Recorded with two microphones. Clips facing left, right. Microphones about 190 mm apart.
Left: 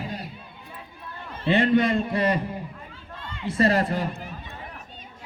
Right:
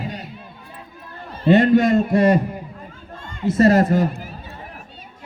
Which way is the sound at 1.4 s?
45° right (ahead or behind).